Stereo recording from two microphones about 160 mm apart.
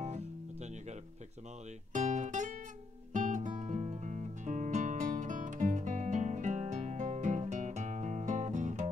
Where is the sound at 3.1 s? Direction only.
50° right (ahead or behind).